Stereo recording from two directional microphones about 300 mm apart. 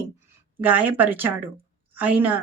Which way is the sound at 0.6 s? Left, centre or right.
Centre.